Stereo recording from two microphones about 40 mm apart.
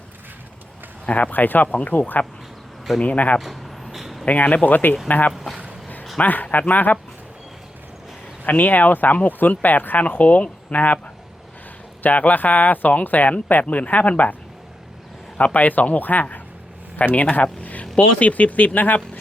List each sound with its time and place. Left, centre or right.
1.0 s speech: left
3.0 s speech: left
3.4 s a sound: centre
4.3 s speech: left
5.3 s speech: centre
6.1 s speech: left
8.4 s speech: left
12.0 s speech: left
15.4 s speech: left
17.4 s a sound: left
17.9 s speech: left